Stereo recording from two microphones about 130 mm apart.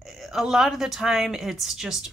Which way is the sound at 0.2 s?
Centre (ahead or behind).